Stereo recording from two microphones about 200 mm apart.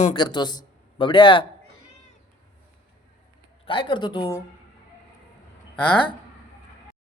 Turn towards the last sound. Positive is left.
turn(degrees=5)  # may be behind; listen again after turning